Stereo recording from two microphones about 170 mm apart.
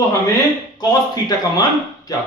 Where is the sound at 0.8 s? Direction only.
25° left (ahead or behind).